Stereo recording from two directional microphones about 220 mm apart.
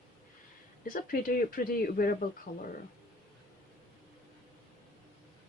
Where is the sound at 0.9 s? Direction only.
40° left (ahead or behind).